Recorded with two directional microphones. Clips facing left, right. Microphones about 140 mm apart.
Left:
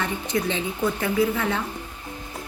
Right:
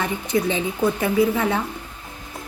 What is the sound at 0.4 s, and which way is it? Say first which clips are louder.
Speech: right 4 dB; 15° right (ahead or behind).